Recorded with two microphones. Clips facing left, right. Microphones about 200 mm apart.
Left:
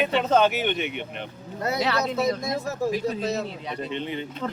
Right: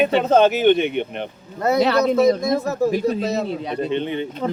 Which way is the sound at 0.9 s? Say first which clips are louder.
Right 9 dB; 50° right (ahead or behind).